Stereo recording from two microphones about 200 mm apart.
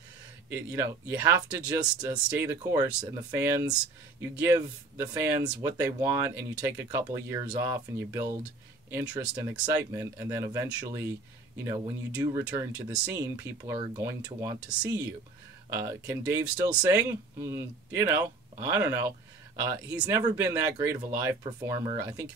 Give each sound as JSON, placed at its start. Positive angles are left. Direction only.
{"t": 0.5, "sound": "speech", "side_deg": -10}